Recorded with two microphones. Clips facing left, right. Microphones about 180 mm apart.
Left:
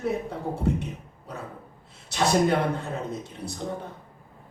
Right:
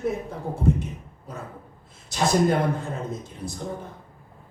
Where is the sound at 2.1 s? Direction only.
65° left (ahead or behind).